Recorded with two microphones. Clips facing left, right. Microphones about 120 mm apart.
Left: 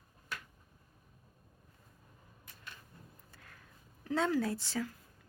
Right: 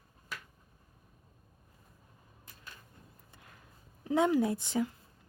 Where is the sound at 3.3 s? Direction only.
20° right (ahead or behind).